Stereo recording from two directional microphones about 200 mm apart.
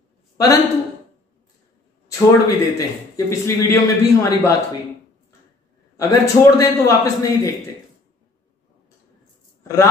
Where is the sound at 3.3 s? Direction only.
15° left (ahead or behind).